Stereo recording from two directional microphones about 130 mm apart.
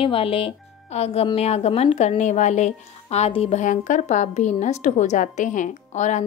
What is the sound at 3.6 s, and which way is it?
A woman's voice, 75° left (ahead or behind).